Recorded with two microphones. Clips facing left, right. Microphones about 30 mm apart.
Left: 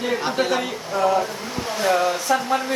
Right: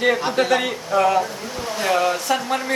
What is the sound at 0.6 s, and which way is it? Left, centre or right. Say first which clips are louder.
Speech: right 3 dB; right.